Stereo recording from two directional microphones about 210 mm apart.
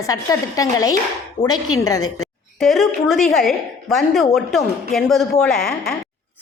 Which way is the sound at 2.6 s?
Centre (ahead or behind).